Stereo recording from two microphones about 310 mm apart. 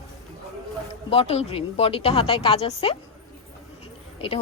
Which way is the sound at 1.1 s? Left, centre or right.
Centre.